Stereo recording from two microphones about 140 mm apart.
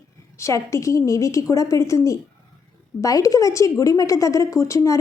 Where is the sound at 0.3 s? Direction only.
20° left (ahead or behind).